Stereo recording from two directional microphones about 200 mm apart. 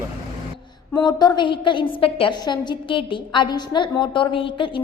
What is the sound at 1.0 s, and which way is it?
A woman's voice, 20° left (ahead or behind).